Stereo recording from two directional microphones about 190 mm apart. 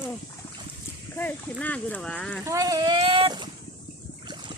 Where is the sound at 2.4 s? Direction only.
15° right (ahead or behind).